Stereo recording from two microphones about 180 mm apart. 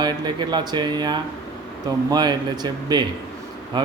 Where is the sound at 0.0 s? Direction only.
25° right (ahead or behind).